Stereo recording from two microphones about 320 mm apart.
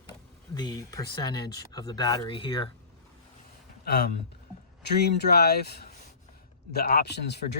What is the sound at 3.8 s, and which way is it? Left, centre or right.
Speech, left.